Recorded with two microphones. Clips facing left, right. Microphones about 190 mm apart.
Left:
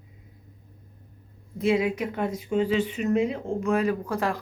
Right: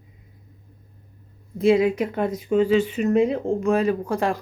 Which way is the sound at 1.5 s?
35° right (ahead or behind).